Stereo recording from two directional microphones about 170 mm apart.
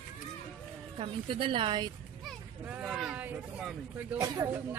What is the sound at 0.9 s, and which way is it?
Speech, 30° right (ahead or behind).